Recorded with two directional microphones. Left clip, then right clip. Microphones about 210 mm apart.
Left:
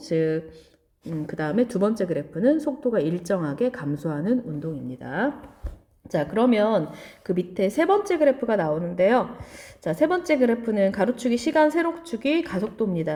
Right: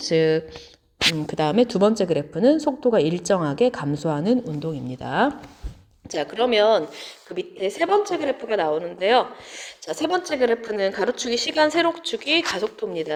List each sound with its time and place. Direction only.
0.0 s a woman's voice: 15° right (ahead or behind)